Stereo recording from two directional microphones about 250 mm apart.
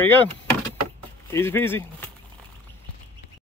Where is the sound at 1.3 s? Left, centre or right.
Centre.